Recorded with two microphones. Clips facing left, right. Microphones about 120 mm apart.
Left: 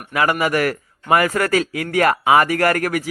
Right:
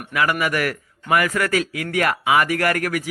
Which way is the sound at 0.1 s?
30° left (ahead or behind).